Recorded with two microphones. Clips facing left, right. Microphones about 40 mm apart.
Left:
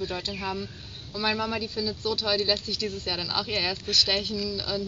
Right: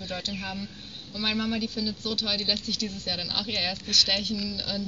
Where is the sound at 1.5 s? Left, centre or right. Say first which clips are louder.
Even; centre.